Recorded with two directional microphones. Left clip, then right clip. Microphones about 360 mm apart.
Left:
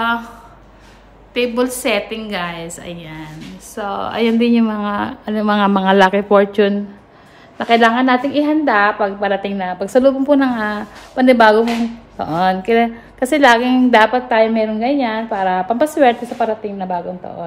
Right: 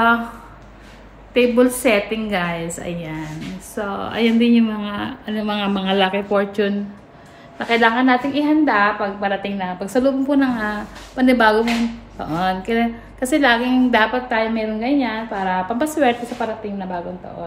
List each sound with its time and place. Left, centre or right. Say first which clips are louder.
1.3 s a woman's voice: right 2 dB; centre; by 17.0 s left